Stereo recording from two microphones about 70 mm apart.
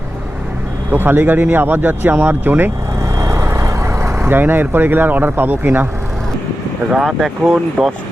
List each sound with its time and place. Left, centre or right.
0.9 s speech: right
3.2 s vehicle: right
7.0 s speech: centre